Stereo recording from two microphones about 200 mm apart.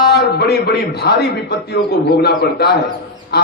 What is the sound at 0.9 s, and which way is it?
A man's voice, 55° left (ahead or behind).